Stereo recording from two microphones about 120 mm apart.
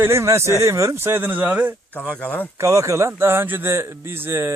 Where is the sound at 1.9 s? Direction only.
10° left (ahead or behind).